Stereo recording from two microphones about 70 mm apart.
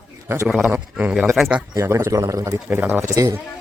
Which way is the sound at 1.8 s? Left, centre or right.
Right.